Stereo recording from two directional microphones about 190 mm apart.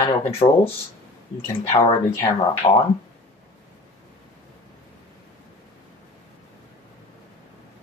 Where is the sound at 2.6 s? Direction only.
25° left (ahead or behind).